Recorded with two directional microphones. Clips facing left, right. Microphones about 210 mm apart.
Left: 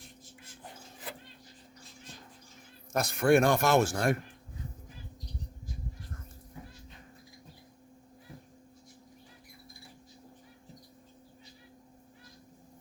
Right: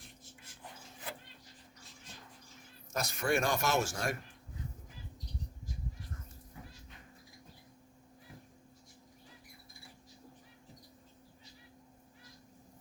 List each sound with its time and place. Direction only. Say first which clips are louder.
2.9 s a man's voice: left 9 dB; 55° left (ahead or behind)